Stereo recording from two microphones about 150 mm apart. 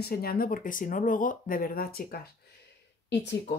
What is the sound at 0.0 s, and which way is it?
Speech, 90° left.